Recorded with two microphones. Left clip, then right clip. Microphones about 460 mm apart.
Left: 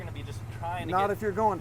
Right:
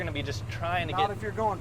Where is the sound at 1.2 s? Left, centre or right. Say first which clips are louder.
Left 3 dB; left.